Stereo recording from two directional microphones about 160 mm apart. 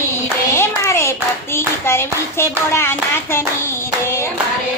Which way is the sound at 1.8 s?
15° left (ahead or behind).